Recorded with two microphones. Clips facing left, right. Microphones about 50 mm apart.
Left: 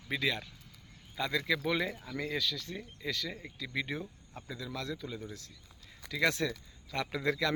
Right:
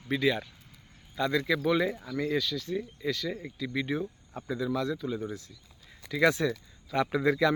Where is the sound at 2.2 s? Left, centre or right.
Centre.